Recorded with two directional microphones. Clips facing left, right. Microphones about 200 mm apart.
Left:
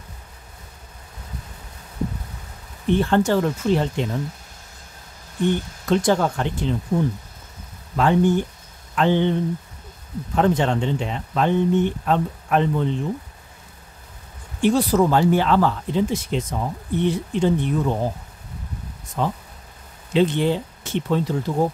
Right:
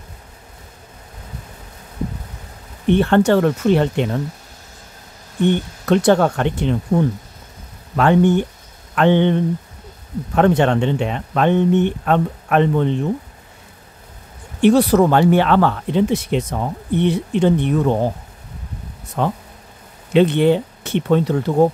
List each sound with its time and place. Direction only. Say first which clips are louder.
2.9 s speech: right 5 dB; 65° right (ahead or behind)
5.4 s speech: right 4 dB; 65° right (ahead or behind)
7.9 s speech: right 4 dB; 65° right (ahead or behind)
14.6 s speech: right 5 dB; 65° right (ahead or behind)
19.2 s speech: right 4 dB; 65° right (ahead or behind)